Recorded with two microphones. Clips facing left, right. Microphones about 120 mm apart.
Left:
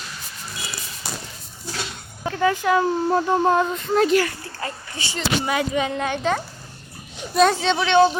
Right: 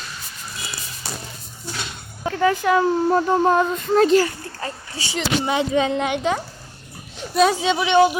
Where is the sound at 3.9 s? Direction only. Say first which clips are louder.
Right 3 dB; 35° right (ahead or behind).